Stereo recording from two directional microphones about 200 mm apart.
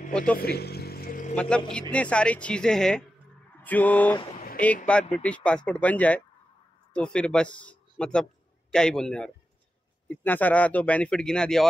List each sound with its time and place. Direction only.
0.4 s vehicle: 50° left (ahead or behind)
1.3 s a man's voice: 5° left (ahead or behind)